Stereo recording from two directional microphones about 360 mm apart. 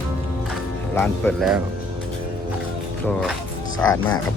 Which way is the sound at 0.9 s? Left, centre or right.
Centre.